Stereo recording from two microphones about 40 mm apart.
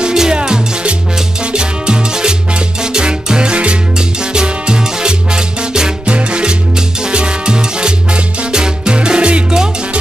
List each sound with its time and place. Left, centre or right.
0.0 s music: centre
6.1 s salsa music: right
8.4 s music: centre